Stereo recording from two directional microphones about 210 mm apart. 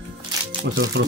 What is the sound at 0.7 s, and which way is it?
Speech, 60° right (ahead or behind).